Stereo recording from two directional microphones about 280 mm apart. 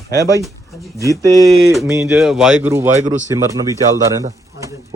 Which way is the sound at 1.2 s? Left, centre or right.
Centre.